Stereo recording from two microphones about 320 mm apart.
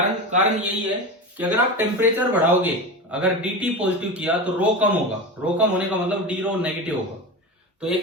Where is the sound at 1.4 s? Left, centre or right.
Centre.